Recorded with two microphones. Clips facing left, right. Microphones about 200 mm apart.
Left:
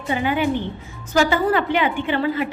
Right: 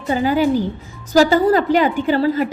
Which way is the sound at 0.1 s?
40° right (ahead or behind).